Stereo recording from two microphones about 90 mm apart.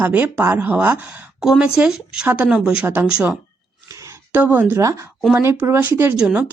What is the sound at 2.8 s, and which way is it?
Speech, 25° right (ahead or behind).